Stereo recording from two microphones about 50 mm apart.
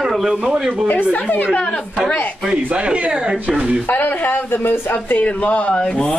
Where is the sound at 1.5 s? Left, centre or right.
Left.